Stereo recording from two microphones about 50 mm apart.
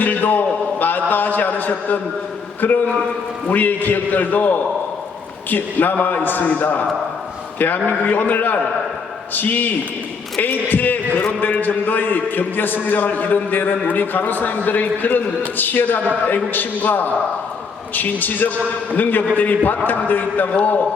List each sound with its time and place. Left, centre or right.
0.0 s a sound: left
2.6 s a man's voice: left
7.9 s a man's voice: left